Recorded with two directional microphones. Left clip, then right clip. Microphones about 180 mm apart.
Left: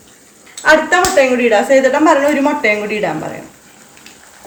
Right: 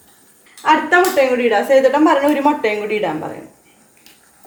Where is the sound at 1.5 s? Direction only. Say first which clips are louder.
Left 2 dB; 25° right (ahead or behind).